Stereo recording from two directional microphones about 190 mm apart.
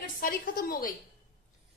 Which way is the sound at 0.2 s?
50° left (ahead or behind).